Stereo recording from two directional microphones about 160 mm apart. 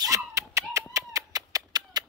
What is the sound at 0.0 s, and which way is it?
Dog, 20° right (ahead or behind).